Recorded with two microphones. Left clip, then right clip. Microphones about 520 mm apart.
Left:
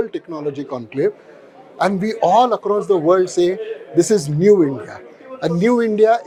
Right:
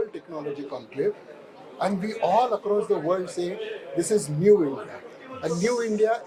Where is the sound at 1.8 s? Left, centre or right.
Left.